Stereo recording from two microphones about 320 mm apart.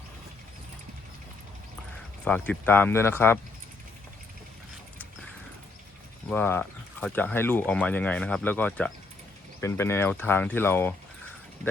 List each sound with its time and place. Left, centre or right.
2.2 s speech: centre
6.3 s speech: centre